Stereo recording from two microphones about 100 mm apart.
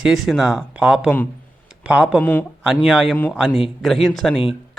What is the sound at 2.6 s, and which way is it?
A man's voice, centre (ahead or behind).